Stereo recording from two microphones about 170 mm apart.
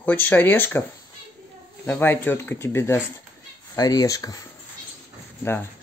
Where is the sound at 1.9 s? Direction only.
10° left (ahead or behind).